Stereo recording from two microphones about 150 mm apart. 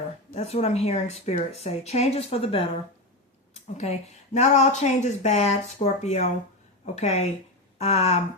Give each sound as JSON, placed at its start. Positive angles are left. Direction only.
{"t": 0.3, "sound": "speech", "side_deg": 45}
{"t": 3.5, "sound": "a sound", "side_deg": 50}
{"t": 4.4, "sound": "speech", "side_deg": 50}